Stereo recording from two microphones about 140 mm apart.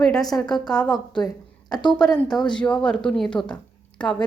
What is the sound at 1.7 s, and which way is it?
Speech, 35° left (ahead or behind).